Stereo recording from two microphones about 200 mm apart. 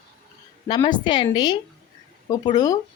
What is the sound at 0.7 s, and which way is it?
A woman's voice, 20° left (ahead or behind).